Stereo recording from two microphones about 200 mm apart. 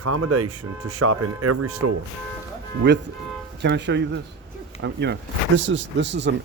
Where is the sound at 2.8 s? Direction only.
60° right (ahead or behind).